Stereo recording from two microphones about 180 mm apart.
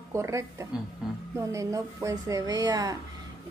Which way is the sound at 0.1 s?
15° right (ahead or behind).